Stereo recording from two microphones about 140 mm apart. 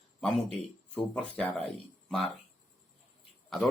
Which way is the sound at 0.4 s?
10° left (ahead or behind).